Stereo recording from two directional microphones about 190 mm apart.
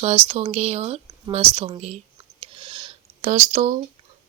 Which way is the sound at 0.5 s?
35° right (ahead or behind).